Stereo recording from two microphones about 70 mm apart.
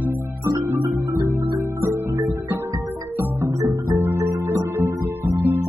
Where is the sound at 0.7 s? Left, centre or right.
Right.